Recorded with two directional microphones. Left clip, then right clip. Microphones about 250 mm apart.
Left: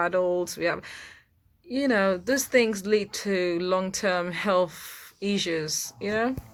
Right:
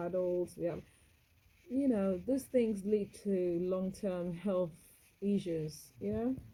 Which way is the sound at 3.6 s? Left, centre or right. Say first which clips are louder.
Left 11 dB; centre.